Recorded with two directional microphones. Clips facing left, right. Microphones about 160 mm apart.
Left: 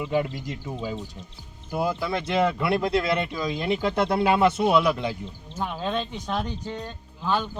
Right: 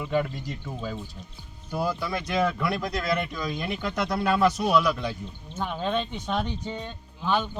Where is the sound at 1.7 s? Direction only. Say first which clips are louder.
Left 2 dB; 20° left (ahead or behind).